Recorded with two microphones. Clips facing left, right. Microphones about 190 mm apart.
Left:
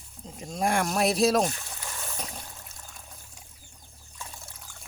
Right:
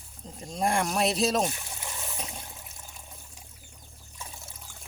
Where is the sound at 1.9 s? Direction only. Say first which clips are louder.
Even; 20° right (ahead or behind).